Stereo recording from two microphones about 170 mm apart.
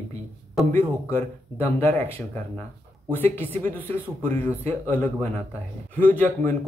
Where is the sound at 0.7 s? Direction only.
15° left (ahead or behind).